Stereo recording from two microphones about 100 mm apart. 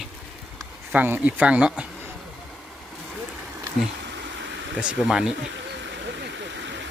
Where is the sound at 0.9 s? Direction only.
15° right (ahead or behind).